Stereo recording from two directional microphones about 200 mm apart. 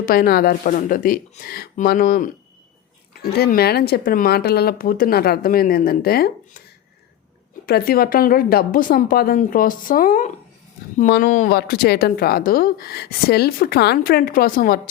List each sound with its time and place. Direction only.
0.0 s speech: 50° left (ahead or behind)
7.7 s speech: 50° left (ahead or behind)
11.5 s speech: 50° left (ahead or behind)